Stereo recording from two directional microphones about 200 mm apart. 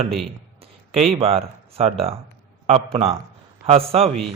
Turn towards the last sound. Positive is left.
turn(degrees=-30)  # may be behind; listen again after turning